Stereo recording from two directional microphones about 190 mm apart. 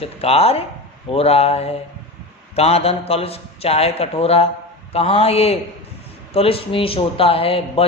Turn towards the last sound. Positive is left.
turn(degrees=30)  # may be behind; listen again after turning